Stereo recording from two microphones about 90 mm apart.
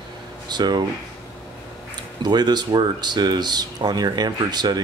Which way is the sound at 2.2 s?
50° right (ahead or behind).